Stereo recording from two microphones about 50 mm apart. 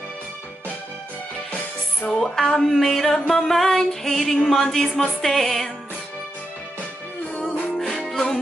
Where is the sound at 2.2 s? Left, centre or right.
Centre.